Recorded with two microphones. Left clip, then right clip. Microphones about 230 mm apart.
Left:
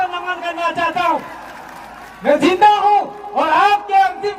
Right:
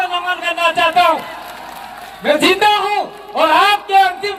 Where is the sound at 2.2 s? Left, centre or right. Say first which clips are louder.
Left 1 dB; right.